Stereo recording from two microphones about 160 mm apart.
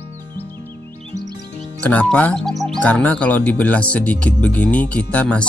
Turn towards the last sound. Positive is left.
turn(degrees=10)  # may be behind; listen again after turning